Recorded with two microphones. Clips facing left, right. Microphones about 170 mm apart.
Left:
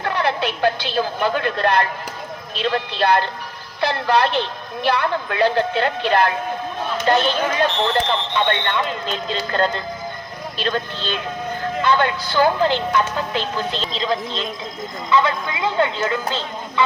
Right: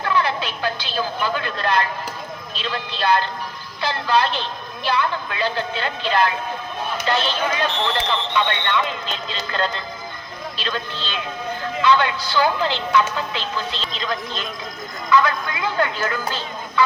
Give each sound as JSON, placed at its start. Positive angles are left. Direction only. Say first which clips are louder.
{"t": 0.0, "sound": "a woman's voice", "louder": "left 1 dB", "side_deg": 60}
{"t": 7.0, "sound": "speech", "louder": "left 5 dB", "side_deg": 50}
{"t": 13.9, "sound": "speech", "louder": "left 4 dB", "side_deg": 30}